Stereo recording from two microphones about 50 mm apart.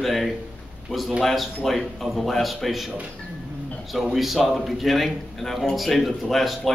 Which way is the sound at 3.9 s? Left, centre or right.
Centre.